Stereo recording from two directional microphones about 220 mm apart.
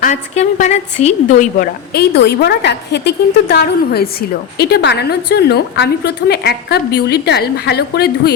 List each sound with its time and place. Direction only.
0.0 s a woman's voice: 35° left (ahead or behind)